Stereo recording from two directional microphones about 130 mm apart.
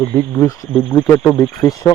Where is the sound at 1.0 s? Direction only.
20° left (ahead or behind).